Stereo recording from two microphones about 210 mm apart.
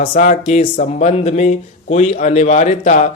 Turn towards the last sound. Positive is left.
turn(degrees=35)  # may be behind; listen again after turning